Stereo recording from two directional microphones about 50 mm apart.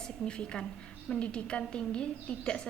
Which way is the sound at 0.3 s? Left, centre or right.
Centre.